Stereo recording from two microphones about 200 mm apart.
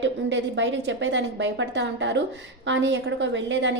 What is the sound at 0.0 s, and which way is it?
A woman's voice, 65° right (ahead or behind).